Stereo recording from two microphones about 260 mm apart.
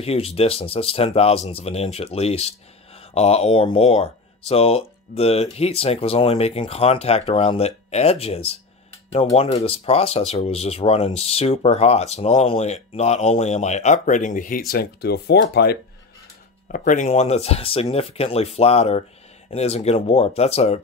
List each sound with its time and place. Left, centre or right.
0.0 s speech: left